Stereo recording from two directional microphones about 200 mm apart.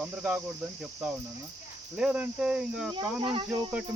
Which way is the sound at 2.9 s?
25° right (ahead or behind).